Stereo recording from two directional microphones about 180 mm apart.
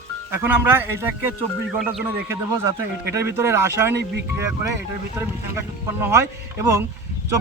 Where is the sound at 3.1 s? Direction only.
15° right (ahead or behind).